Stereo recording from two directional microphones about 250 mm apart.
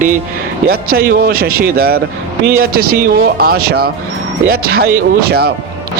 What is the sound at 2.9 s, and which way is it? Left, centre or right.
Speech, right.